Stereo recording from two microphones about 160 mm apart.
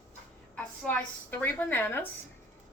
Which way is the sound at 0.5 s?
10° left (ahead or behind).